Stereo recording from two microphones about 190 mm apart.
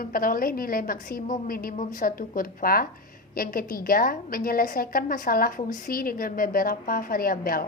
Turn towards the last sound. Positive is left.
turn(degrees=50)  # may be behind; listen again after turning